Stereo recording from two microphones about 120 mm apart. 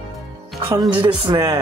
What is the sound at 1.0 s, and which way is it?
Speech, 40° right (ahead or behind).